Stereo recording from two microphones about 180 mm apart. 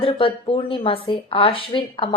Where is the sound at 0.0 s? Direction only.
30° left (ahead or behind).